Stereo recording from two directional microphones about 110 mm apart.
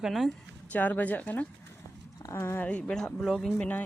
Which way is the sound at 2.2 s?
25° left (ahead or behind).